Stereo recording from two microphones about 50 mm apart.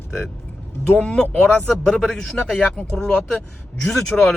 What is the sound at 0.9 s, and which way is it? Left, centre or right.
Speech, left.